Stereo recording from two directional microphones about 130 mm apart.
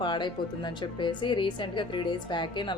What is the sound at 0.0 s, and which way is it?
A woman's voice, 35° left (ahead or behind).